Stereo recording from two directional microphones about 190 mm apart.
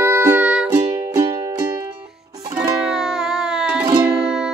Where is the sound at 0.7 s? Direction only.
20° right (ahead or behind).